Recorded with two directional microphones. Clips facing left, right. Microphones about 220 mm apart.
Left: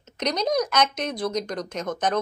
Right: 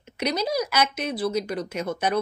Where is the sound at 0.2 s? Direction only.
5° right (ahead or behind).